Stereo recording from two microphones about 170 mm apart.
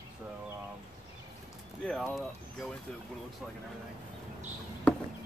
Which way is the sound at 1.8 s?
5° left (ahead or behind).